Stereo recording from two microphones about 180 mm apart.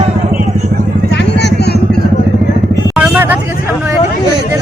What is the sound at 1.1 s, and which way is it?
Vehicle, 70° left (ahead or behind).